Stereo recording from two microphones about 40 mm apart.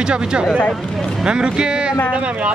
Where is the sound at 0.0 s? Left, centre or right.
Right.